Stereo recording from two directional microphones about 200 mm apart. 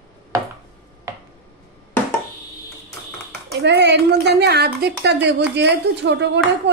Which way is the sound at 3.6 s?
60° right (ahead or behind).